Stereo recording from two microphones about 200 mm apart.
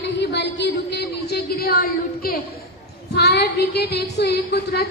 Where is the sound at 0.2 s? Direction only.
60° left (ahead or behind).